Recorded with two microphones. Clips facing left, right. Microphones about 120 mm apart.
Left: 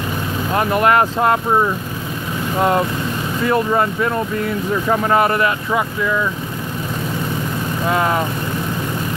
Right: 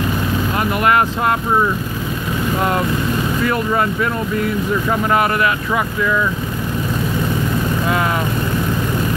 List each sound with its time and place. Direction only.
0.6 s speech: 35° left (ahead or behind)
3.4 s speech: 30° left (ahead or behind)
7.9 s speech: 30° left (ahead or behind)